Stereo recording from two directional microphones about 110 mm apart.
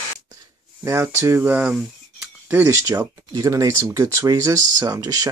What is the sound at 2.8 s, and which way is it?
Speech, 35° right (ahead or behind).